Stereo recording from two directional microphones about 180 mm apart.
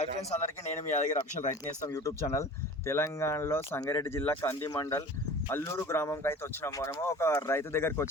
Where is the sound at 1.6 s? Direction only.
20° left (ahead or behind).